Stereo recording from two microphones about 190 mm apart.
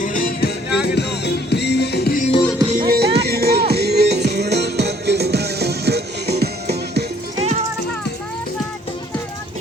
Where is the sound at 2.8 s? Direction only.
55° right (ahead or behind).